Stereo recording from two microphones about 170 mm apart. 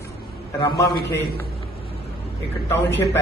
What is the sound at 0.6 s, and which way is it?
Speech, 25° left (ahead or behind).